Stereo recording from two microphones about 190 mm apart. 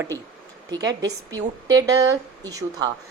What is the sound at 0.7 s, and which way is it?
A woman's voice, 20° right (ahead or behind).